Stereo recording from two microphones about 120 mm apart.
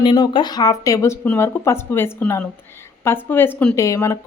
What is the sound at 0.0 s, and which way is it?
Speech, 40° left (ahead or behind).